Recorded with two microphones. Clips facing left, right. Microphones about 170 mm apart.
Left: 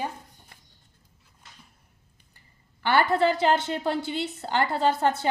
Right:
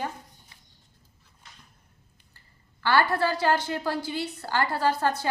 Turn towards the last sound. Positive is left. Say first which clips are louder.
# left 2 dB
turn(degrees=20)  # may be behind; listen again after turning